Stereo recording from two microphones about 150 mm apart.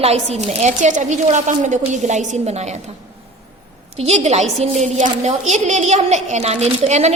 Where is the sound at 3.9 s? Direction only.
45° right (ahead or behind).